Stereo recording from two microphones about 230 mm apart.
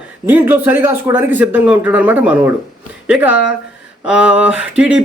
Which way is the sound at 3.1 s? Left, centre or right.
Centre.